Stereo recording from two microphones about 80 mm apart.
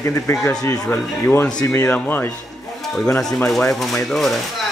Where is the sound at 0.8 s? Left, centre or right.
Left.